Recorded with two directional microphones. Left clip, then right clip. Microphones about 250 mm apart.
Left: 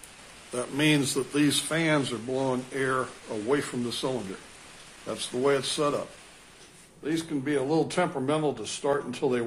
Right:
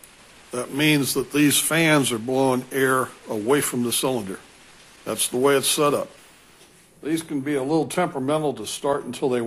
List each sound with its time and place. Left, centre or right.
0.5 s speech: right
7.1 s speech: right